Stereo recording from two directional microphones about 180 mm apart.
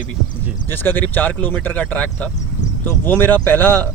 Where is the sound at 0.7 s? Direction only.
10° left (ahead or behind).